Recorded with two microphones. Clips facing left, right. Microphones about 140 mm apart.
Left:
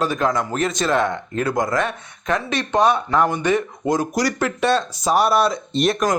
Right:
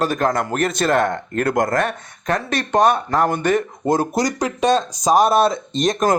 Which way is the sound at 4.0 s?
20° right (ahead or behind).